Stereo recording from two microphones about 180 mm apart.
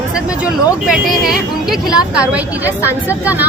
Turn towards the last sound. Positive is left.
turn(degrees=-10)  # may be behind; listen again after turning